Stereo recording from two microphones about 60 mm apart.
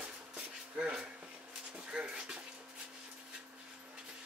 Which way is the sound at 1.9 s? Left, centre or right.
Centre.